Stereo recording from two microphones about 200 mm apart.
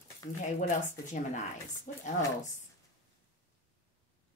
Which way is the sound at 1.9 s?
40° left (ahead or behind).